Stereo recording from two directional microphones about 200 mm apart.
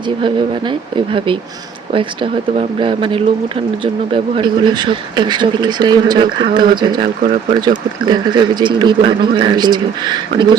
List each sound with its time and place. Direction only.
0.2 s speech: 25° right (ahead or behind)